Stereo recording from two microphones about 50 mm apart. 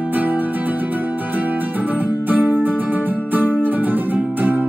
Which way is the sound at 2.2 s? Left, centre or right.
Right.